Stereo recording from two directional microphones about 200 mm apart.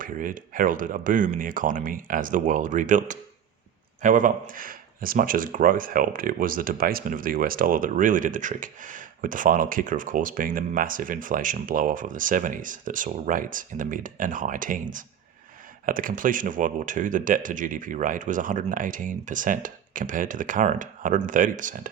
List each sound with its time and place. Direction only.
0.0 s speech: 40° right (ahead or behind)